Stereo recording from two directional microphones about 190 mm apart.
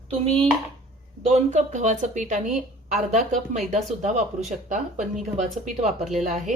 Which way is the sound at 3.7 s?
40° right (ahead or behind).